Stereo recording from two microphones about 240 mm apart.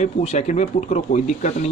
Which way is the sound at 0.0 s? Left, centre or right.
Left.